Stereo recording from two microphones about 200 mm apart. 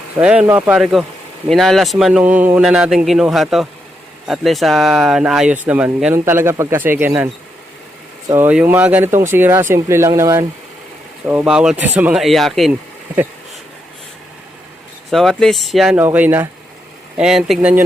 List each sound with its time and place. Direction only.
0.2 s speech: 5° right (ahead or behind)
8.3 s speech: 10° right (ahead or behind)
15.1 s speech: centre (ahead or behind)